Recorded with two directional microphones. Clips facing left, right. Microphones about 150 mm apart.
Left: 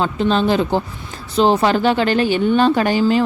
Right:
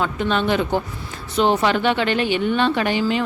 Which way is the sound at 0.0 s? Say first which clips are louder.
Left 4 dB; 30° left (ahead or behind).